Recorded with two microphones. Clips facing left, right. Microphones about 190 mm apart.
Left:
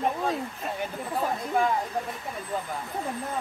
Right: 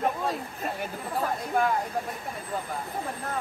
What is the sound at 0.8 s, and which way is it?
Chatter, centre (ahead or behind).